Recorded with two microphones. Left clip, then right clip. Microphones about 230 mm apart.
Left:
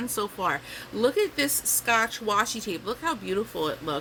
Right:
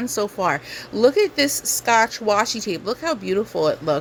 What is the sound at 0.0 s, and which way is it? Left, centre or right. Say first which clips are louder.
Speech: right 6 dB; right.